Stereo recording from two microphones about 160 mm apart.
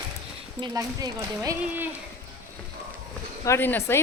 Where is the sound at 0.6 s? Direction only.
20° right (ahead or behind).